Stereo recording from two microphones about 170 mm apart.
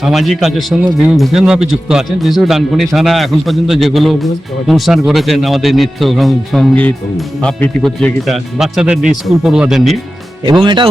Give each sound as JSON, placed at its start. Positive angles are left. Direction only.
{"t": 0.0, "sound": "speech", "side_deg": 0}
{"t": 10.4, "sound": "speech", "side_deg": -25}